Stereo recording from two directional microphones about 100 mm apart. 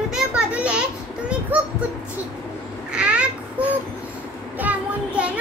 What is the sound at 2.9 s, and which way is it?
Babbling, 10° right (ahead or behind).